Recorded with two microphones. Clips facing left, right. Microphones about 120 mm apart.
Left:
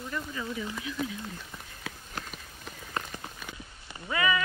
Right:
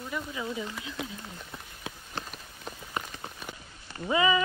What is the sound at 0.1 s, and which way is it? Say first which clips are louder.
Speech: right 2 dB; 15° right (ahead or behind).